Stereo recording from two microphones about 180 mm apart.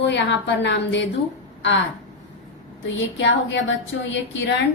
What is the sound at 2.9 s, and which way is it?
Speech, 90° left.